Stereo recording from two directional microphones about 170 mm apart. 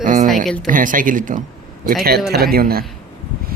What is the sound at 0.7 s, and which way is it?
Speech, 50° right (ahead or behind).